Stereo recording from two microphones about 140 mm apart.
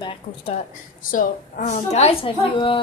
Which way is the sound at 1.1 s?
75° left (ahead or behind).